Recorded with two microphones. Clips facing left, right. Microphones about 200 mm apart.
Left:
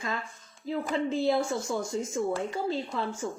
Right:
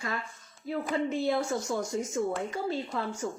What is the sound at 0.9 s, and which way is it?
A woman's voice, 25° left (ahead or behind).